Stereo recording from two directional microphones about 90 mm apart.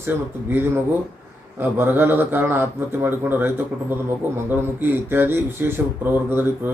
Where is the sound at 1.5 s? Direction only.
25° right (ahead or behind).